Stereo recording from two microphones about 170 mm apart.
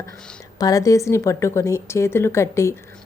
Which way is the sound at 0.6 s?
20° left (ahead or behind).